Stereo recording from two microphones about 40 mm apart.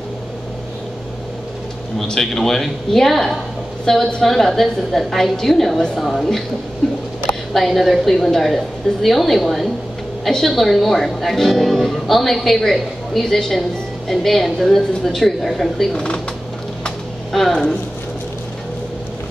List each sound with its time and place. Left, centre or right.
2.3 s a woman's voice: centre
7.5 s speech: centre
15.9 s speech: centre
17.3 s speech: centre